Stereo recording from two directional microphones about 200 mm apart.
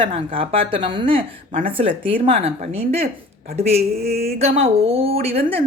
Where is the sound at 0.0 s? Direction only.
25° right (ahead or behind).